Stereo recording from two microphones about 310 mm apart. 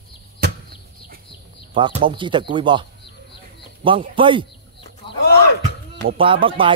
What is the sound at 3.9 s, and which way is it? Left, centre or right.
Speech, centre.